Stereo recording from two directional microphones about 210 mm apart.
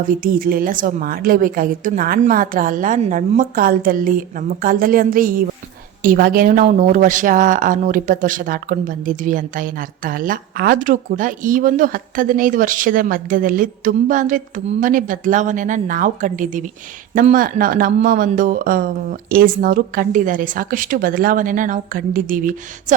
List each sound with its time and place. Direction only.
0.2 s speech: 45° right (ahead or behind)